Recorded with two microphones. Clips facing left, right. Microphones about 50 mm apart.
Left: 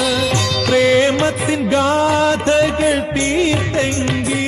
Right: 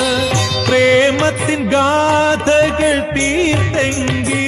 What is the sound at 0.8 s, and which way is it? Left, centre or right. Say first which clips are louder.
Music: right 3 dB; right.